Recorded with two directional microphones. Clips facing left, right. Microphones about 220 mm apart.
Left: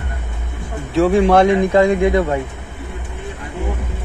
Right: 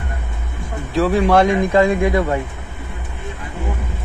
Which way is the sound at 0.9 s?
25° left (ahead or behind).